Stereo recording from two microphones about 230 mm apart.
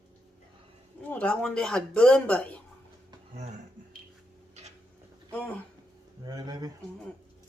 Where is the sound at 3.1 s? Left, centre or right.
Right.